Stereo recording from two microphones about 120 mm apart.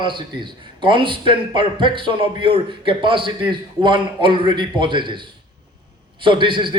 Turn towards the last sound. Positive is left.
turn(degrees=-45)  # may be behind; listen again after turning